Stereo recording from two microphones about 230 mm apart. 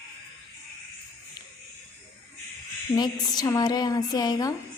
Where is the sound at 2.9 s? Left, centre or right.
Centre.